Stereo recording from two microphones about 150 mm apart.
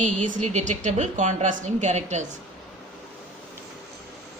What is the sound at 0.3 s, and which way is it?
Speech, 50° right (ahead or behind).